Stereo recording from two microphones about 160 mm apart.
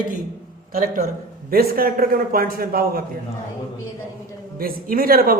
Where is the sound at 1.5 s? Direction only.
65° right (ahead or behind).